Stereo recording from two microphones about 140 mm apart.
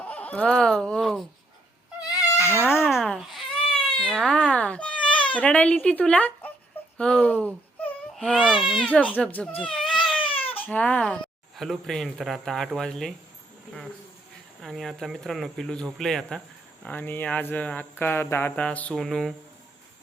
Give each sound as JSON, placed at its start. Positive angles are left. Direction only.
{"t": 0.0, "sound": "speech", "side_deg": 10}
{"t": 2.0, "sound": "cat", "side_deg": 15}
{"t": 2.7, "sound": "baby cry", "side_deg": 0}
{"t": 5.2, "sound": "speech", "side_deg": 10}
{"t": 8.1, "sound": "baby cry", "side_deg": 5}
{"t": 8.4, "sound": "speech", "side_deg": 0}
{"t": 9.6, "sound": "cat", "side_deg": 5}
{"t": 10.2, "sound": "cat", "side_deg": 40}
{"t": 10.6, "sound": "speech", "side_deg": 10}
{"t": 14.6, "sound": "speech", "side_deg": 0}